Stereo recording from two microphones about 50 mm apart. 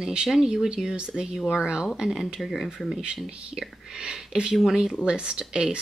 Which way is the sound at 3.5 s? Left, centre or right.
Centre.